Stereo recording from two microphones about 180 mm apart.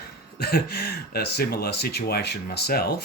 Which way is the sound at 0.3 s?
60° left (ahead or behind).